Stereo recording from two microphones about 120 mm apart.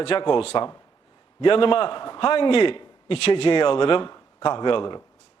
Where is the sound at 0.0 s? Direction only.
45° left (ahead or behind).